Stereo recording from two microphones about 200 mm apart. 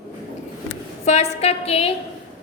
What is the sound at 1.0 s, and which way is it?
Speech, 35° left (ahead or behind).